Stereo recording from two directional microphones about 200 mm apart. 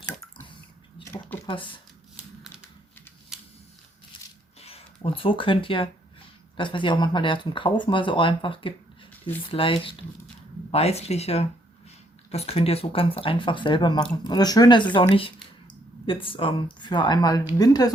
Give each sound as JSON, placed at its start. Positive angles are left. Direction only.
{"t": 3.3, "sound": "camera", "side_deg": 0}
{"t": 4.1, "sound": "a sound", "side_deg": 25}
{"t": 4.6, "sound": "speech", "side_deg": 30}